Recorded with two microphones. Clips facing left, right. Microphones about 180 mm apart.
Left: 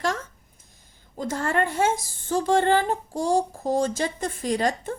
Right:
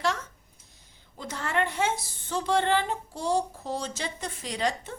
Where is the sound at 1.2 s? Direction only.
45° left (ahead or behind).